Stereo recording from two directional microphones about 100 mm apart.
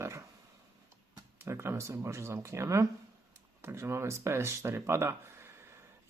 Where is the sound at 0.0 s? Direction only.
30° right (ahead or behind).